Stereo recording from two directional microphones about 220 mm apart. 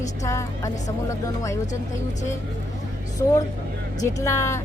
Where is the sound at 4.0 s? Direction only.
10° left (ahead or behind).